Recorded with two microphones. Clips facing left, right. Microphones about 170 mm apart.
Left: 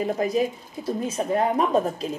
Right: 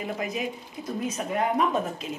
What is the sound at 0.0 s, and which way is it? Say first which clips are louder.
Speech: left 7 dB; 35° left (ahead or behind).